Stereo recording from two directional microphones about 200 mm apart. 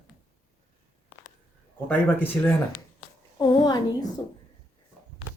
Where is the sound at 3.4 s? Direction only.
20° left (ahead or behind).